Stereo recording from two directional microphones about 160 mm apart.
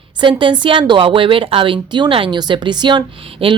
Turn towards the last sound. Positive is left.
turn(degrees=-35)  # may be behind; listen again after turning